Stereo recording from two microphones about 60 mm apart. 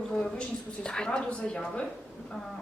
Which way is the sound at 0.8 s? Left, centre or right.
Centre.